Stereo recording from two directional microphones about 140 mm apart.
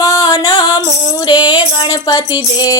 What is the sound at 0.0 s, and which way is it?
Music, 25° left (ahead or behind).